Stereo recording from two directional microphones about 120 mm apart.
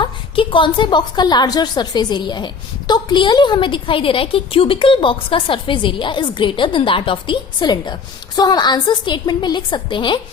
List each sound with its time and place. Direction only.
0.0 s a woman's voice: 45° left (ahead or behind)